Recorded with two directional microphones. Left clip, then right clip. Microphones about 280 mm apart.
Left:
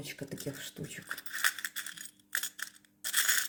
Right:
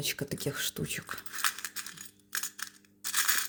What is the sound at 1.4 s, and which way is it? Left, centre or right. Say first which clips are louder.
Coin: left 1 dB; centre.